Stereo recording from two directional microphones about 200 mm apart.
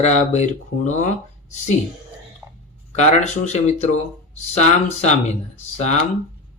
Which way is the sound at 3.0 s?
35° left (ahead or behind).